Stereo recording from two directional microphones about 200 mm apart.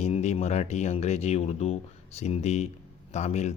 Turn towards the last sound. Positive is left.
turn(degrees=35)  # may be behind; listen again after turning